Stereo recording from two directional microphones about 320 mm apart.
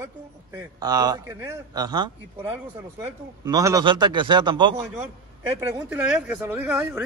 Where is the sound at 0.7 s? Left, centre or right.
Centre.